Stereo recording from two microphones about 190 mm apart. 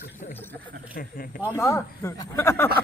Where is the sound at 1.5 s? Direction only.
15° left (ahead or behind).